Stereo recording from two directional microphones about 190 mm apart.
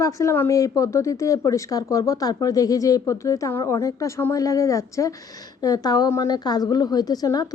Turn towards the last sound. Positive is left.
turn(degrees=20)  # may be behind; listen again after turning